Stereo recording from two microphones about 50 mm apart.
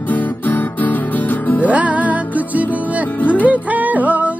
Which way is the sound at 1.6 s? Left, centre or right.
Right.